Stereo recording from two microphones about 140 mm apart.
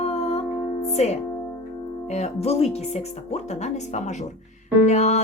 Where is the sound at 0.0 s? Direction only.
50° left (ahead or behind).